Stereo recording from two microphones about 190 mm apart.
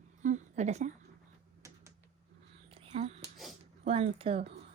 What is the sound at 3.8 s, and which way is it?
Speech, 30° right (ahead or behind).